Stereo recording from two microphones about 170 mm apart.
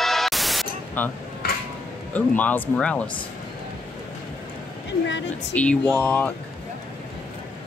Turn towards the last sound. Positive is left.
turn(degrees=5)  # may be behind; listen again after turning